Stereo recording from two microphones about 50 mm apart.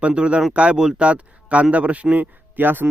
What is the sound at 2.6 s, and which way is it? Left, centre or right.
Speech, right.